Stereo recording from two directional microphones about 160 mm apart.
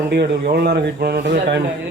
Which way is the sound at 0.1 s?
85° right.